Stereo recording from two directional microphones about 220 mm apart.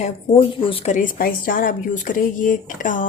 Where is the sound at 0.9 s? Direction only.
40° left (ahead or behind).